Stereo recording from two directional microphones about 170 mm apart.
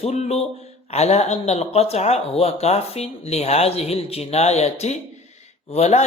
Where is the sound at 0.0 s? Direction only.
40° left (ahead or behind).